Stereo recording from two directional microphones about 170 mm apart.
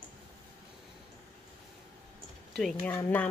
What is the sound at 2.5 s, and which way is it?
Speech, 5° left (ahead or behind).